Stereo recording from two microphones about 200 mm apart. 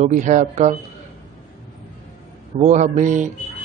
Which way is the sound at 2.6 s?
35° right (ahead or behind).